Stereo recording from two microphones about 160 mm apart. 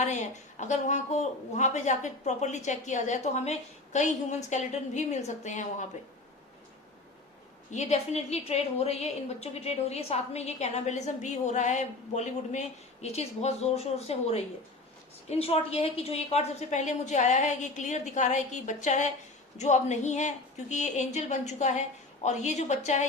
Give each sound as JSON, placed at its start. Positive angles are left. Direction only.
{"t": 0.6, "sound": "a woman's voice", "side_deg": 45}
{"t": 7.7, "sound": "a woman's voice", "side_deg": 45}